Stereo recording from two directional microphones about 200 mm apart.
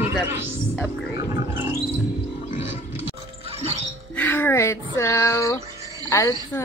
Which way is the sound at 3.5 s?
30° right (ahead or behind).